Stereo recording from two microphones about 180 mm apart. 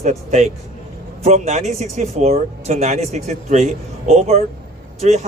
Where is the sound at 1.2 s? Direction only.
40° right (ahead or behind).